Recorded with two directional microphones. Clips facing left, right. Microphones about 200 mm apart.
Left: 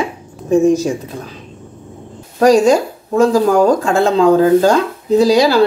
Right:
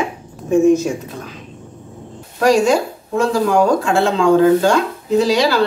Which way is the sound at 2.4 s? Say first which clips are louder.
Left 4 dB; 40° left (ahead or behind).